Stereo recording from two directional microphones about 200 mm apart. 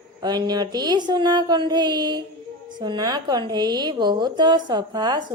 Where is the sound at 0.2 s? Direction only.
20° right (ahead or behind).